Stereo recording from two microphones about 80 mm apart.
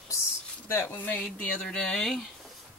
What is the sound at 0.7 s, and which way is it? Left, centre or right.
Speech, left.